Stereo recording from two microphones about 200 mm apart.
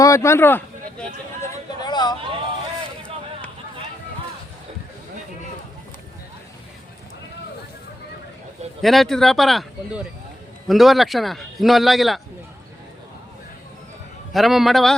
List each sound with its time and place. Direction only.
0.0 s a sound: 15° left (ahead or behind)
8.8 s a man's voice: centre (ahead or behind)
14.3 s a man's voice: centre (ahead or behind)